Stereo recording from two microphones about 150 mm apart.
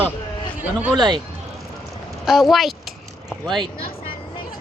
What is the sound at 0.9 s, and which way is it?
Speech, 30° right (ahead or behind).